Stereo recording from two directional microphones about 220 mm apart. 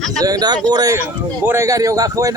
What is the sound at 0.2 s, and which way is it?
A man's voice, 15° right (ahead or behind).